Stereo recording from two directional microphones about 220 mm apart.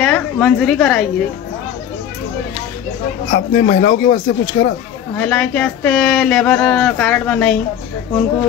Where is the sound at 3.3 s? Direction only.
40° left (ahead or behind).